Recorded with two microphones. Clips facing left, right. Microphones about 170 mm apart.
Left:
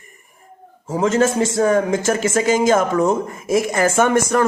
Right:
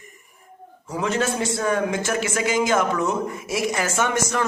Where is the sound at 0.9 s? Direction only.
45° left (ahead or behind).